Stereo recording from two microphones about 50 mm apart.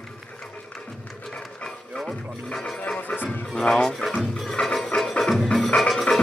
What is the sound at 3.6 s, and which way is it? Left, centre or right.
Speech, centre.